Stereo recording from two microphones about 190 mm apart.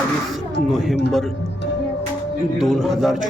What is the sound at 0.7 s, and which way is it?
Speech, centre (ahead or behind).